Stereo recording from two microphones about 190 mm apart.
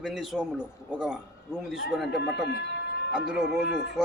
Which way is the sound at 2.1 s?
60° left (ahead or behind).